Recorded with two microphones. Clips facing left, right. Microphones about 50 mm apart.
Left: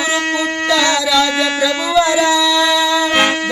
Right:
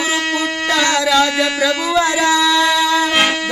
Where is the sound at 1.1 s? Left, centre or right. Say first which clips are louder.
Even; right.